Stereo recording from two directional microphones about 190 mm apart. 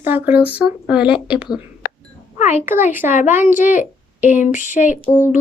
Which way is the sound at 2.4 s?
35° left (ahead or behind).